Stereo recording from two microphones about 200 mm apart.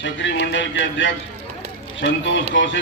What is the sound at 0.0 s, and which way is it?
A man's voice, 65° left (ahead or behind).